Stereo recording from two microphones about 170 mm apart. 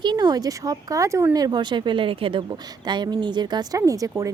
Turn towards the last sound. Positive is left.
turn(degrees=-20)  # may be behind; listen again after turning